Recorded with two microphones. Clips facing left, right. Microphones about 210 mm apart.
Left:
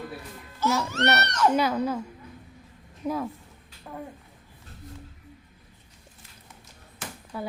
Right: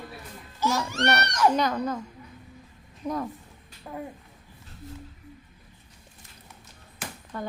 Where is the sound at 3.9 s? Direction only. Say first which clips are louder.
Right 2 dB; 10° right (ahead or behind).